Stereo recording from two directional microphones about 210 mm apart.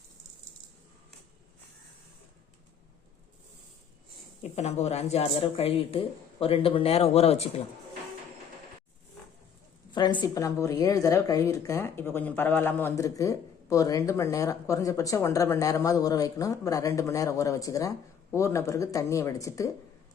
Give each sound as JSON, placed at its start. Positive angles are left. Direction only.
{"t": 4.5, "sound": "speech", "side_deg": 30}
{"t": 9.9, "sound": "a woman's voice", "side_deg": 20}